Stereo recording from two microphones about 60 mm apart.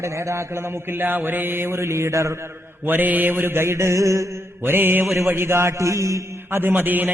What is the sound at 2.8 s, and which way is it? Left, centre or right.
Mantra, right.